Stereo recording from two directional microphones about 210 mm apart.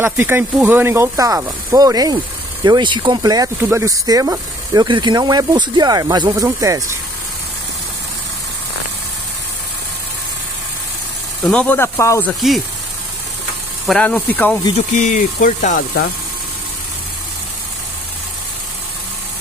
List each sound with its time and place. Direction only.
0.0 s speech: 10° right (ahead or behind)
11.4 s speech: 5° left (ahead or behind)
13.8 s speech: 5° left (ahead or behind)
14.9 s speech: 35° left (ahead or behind)